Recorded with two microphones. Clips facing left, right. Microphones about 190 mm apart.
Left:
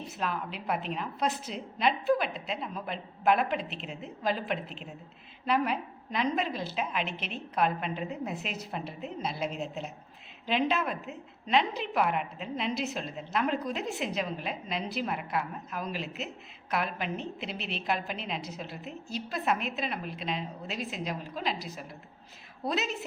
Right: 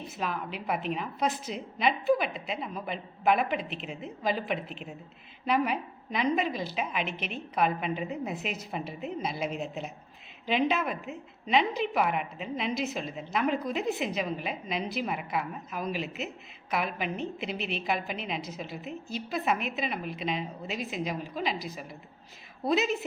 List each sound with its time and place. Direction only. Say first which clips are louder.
0.2 s a woman's voice: right 1 dB; 5° right (ahead or behind)
17.6 s a woman's voice: right 3 dB; 50° right (ahead or behind)
17.8 s a woman's voice: left 2 dB; 5° right (ahead or behind)